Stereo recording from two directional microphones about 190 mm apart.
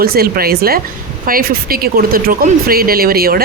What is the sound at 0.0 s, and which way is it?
Speech, 55° right (ahead or behind).